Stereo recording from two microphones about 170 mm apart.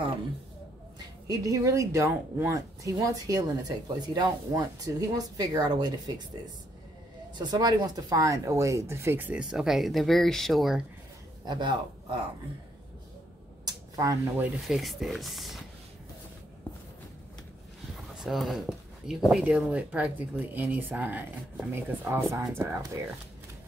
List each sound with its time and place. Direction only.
0.9 s speech: 20° right (ahead or behind)
7.3 s speech: 25° right (ahead or behind); by 10.8 s centre (ahead or behind)
11.4 s speech: 25° right (ahead or behind)
13.7 s a sound: 20° right (ahead or behind)
14.7 s speech: centre (ahead or behind)
18.1 s speech: centre (ahead or behind)